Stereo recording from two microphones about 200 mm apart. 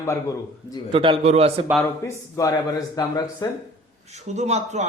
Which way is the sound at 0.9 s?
25° right (ahead or behind).